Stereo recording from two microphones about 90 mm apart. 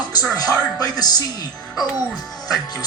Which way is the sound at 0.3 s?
45° left (ahead or behind).